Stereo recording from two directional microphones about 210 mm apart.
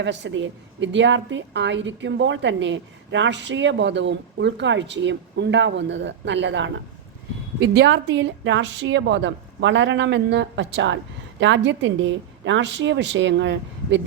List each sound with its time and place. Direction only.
0.0 s a woman's voice: 60° right (ahead or behind)